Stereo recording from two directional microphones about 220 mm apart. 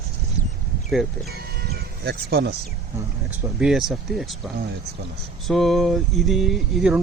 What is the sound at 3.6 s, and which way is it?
Speech, centre (ahead or behind).